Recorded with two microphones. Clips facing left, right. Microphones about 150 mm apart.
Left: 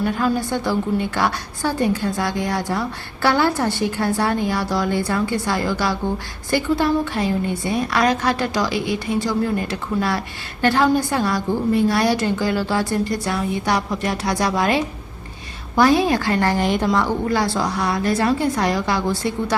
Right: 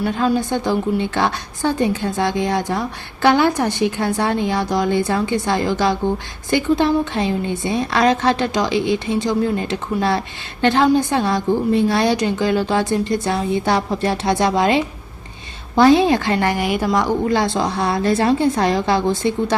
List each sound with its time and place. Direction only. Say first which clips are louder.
0.0 s a woman's voice: right 2 dB; 15° right (ahead or behind)